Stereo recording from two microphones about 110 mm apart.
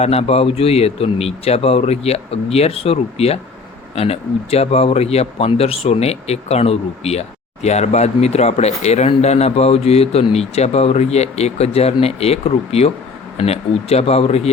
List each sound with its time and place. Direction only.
0.0 s a man's voice: 70° left (ahead or behind)